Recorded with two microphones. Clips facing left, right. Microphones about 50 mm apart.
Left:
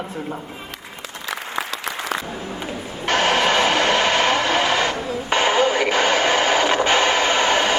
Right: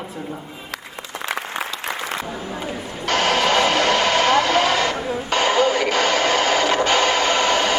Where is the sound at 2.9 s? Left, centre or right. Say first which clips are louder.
Left 1 dB; left.